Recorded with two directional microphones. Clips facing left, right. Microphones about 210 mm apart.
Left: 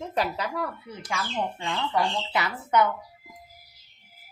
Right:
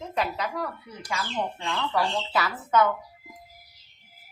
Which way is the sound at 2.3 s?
20° left (ahead or behind).